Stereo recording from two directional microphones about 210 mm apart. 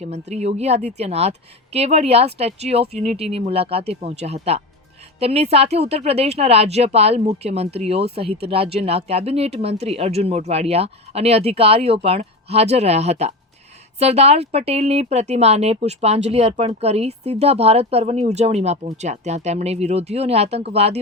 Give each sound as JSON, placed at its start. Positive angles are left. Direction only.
{"t": 0.0, "sound": "speech", "side_deg": -30}